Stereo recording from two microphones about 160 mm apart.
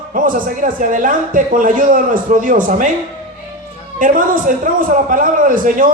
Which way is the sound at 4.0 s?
55° right (ahead or behind).